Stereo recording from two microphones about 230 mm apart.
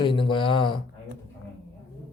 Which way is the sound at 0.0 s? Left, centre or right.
Left.